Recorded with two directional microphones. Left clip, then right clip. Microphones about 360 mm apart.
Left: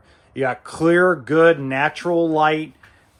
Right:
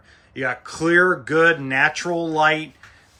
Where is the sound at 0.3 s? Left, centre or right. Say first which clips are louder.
Left 3 dB; centre.